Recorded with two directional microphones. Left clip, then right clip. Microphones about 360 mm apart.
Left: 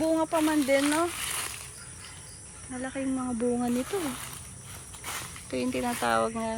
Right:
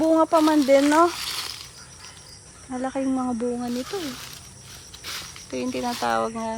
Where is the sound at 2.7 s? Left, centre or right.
Centre.